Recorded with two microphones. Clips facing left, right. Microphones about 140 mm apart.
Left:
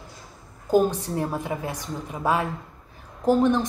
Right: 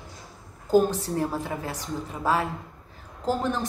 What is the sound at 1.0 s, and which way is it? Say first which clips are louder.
A woman's voice: even; 15° left (ahead or behind).